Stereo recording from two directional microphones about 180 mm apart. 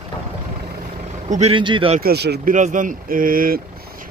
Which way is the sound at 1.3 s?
30° right (ahead or behind).